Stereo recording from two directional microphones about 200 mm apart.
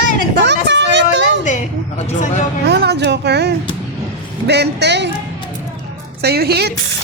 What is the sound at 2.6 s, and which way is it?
Speech, 55° right (ahead or behind).